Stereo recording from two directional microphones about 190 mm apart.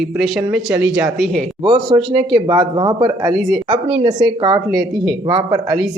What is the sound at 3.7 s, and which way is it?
Speech, 25° right (ahead or behind).